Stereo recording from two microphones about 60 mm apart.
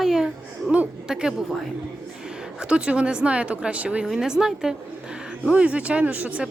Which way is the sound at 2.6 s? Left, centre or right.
Centre.